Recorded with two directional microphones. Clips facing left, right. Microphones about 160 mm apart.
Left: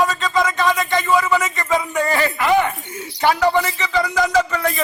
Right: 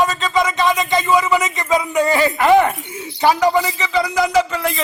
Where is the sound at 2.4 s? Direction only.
45° right (ahead or behind).